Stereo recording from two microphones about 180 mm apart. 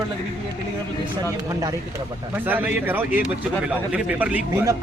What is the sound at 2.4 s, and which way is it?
Speech, 10° right (ahead or behind).